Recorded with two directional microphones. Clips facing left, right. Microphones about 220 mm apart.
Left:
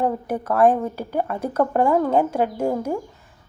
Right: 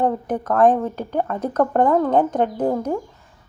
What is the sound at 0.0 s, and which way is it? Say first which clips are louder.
Speech: right 2 dB; 10° left (ahead or behind).